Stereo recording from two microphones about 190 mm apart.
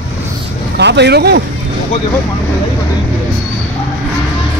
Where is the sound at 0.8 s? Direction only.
65° right (ahead or behind).